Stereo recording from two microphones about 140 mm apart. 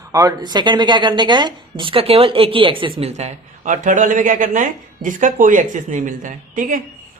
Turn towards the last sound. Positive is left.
turn(degrees=-70)  # may be behind; listen again after turning